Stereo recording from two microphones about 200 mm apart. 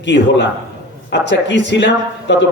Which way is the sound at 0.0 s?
60° left (ahead or behind).